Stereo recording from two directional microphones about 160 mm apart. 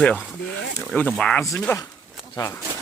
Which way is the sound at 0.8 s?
5° left (ahead or behind).